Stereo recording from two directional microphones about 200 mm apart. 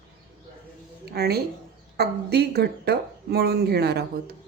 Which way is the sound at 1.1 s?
50° right (ahead or behind).